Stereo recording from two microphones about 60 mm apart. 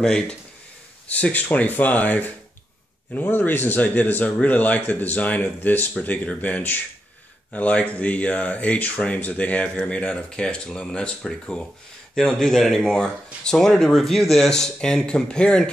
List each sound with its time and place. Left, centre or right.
0.0 s speech: centre
1.0 s speech: left